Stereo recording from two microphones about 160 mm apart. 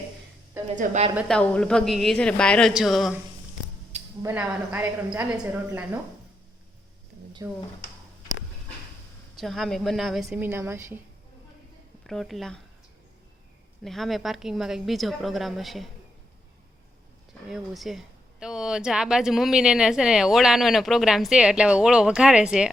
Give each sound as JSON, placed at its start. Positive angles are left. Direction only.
{"t": 0.8, "sound": "a woman's voice", "side_deg": -45}
{"t": 1.3, "sound": "speech", "side_deg": 5}
{"t": 4.2, "sound": "a woman's voice", "side_deg": -15}
{"t": 7.4, "sound": "a woman's voice", "side_deg": -20}
{"t": 9.3, "sound": "speech", "side_deg": 0}
{"t": 10.2, "sound": "a woman's voice", "side_deg": -15}
{"t": 12.0, "sound": "speech", "side_deg": 0}
{"t": 13.8, "sound": "speech", "side_deg": 0}
{"t": 17.5, "sound": "speech", "side_deg": 0}